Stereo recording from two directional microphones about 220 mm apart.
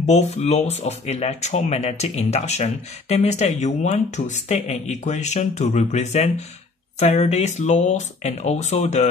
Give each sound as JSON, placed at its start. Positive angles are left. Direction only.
{"t": 0.0, "sound": "speech", "side_deg": 30}